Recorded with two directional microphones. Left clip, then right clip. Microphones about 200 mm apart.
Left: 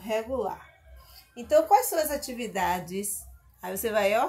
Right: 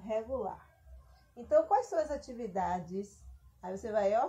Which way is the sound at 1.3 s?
45° left (ahead or behind).